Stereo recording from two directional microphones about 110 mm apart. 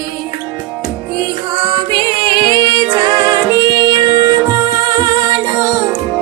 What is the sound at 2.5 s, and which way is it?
Music, 40° right (ahead or behind).